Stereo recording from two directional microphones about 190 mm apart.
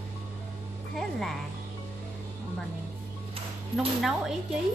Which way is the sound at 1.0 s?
Centre (ahead or behind).